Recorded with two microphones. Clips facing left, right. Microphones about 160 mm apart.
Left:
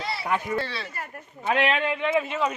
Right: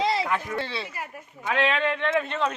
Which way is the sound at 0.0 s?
90° right.